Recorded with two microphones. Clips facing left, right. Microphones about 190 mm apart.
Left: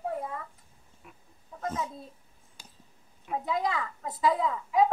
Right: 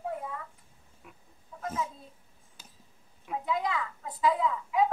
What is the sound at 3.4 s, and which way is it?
A woman's voice, 35° left (ahead or behind).